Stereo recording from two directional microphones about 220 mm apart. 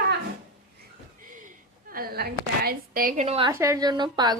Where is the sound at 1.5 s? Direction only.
40° right (ahead or behind).